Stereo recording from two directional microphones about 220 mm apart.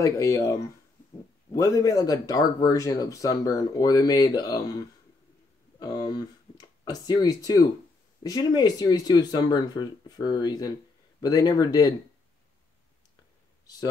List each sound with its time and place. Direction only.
0.0 s speech: 15° left (ahead or behind)